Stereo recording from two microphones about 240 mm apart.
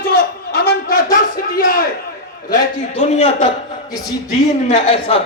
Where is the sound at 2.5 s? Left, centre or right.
Left.